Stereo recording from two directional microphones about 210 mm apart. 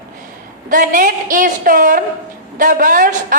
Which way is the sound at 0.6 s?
40° right (ahead or behind).